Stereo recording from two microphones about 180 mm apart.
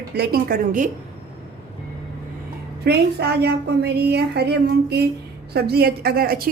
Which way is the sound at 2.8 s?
65° right (ahead or behind).